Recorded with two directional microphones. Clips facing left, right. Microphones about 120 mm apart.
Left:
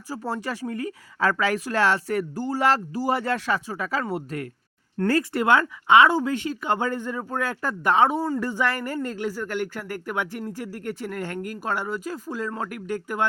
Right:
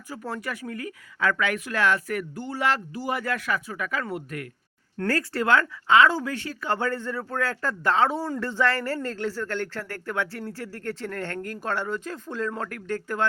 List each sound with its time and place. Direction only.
0.1 s speech: 30° left (ahead or behind); by 13.2 s 10° left (ahead or behind)